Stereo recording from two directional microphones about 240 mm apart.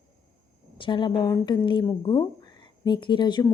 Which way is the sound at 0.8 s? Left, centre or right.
Centre.